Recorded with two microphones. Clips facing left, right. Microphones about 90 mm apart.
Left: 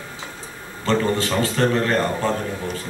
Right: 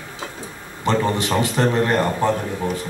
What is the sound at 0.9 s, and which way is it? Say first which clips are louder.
A man's voice: right 1 dB; 20° right (ahead or behind).